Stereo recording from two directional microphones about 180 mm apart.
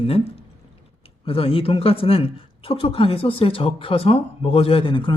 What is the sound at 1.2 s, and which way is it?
A woman's voice, 30° left (ahead or behind).